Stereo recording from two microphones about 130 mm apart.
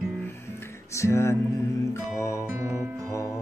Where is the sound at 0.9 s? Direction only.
20° left (ahead or behind).